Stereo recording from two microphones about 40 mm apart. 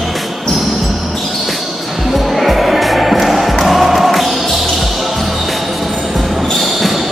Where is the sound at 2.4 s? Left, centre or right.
Centre.